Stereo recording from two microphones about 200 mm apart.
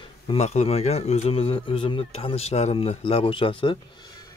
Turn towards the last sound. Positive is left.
turn(degrees=25)  # may be behind; listen again after turning